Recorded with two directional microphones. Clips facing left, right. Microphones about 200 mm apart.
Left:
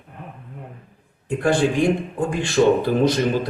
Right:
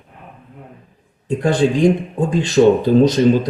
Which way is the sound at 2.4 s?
20° right (ahead or behind).